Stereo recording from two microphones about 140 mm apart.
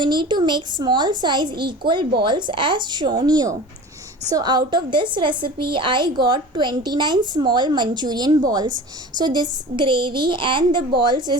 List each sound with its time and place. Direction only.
0.0 s a woman's voice: 30° right (ahead or behind)